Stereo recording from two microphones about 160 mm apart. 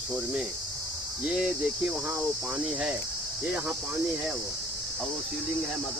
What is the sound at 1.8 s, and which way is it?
Cricket, 5° right (ahead or behind).